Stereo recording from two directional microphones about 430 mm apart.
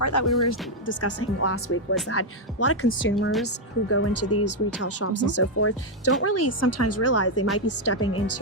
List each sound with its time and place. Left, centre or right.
0.0 s speech: left
0.9 s speech: left